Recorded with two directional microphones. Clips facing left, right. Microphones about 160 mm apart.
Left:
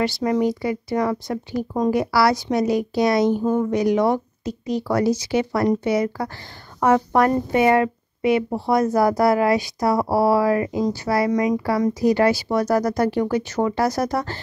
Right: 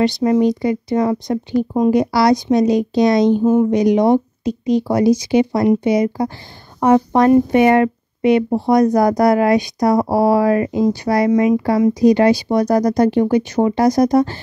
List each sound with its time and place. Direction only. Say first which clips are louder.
0.0 s speech: right 6 dB; 25° right (ahead or behind)